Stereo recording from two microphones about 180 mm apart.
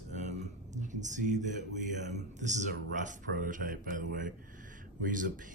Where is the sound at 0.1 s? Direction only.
40° right (ahead or behind).